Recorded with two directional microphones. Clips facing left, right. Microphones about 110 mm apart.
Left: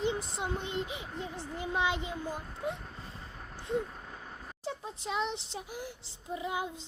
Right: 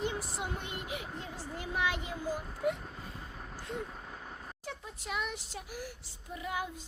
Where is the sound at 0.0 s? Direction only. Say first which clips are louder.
Left 3 dB; 20° left (ahead or behind).